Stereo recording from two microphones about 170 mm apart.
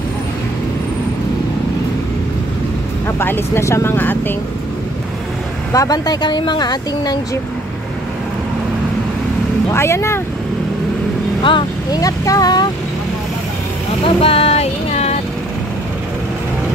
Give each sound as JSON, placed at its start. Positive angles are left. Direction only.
{"t": 3.2, "sound": "speech", "side_deg": 15}
{"t": 5.7, "sound": "speech", "side_deg": 20}
{"t": 9.7, "sound": "speech", "side_deg": 15}
{"t": 11.4, "sound": "speech", "side_deg": 25}
{"t": 14.0, "sound": "speech", "side_deg": 35}